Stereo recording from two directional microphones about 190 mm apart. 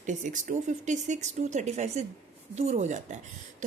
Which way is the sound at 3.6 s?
40° right (ahead or behind).